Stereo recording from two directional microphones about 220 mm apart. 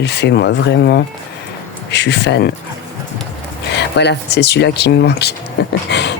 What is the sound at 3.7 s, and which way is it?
Speech, 50° left (ahead or behind).